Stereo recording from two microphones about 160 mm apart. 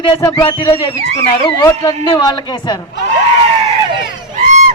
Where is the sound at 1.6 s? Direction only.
20° left (ahead or behind).